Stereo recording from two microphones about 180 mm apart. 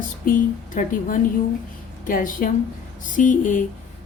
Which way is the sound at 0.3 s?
50° left (ahead or behind).